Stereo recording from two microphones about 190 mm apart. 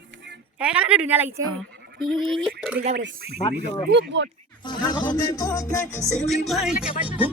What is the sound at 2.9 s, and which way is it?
Speech, 60° right (ahead or behind).